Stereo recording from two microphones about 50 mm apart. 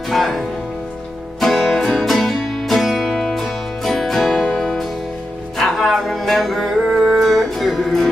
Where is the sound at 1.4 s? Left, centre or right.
Centre.